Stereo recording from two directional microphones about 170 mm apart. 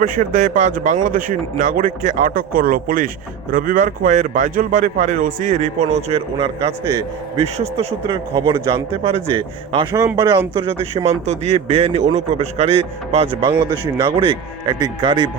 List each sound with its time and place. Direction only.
0.0 s a man's voice: 50° right (ahead or behind); by 15.3 s 25° right (ahead or behind)